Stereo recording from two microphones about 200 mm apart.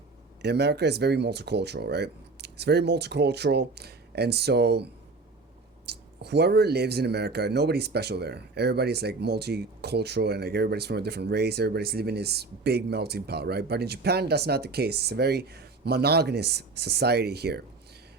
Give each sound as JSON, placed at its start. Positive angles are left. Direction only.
{"t": 0.4, "sound": "speech", "side_deg": -55}